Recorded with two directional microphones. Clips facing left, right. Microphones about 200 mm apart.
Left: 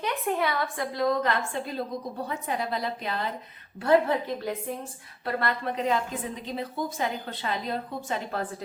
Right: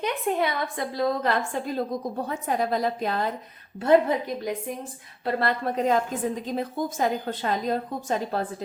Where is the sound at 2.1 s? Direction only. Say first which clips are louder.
Right 4 dB; 45° right (ahead or behind).